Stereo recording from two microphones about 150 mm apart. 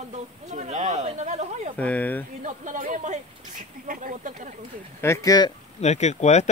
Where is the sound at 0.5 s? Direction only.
50° right (ahead or behind).